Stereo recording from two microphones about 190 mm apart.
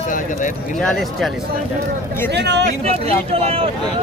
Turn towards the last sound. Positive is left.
turn(degrees=-30)  # may be behind; listen again after turning